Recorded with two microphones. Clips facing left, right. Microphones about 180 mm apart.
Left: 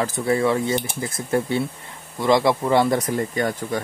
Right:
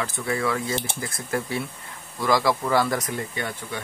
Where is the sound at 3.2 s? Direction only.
40° left (ahead or behind).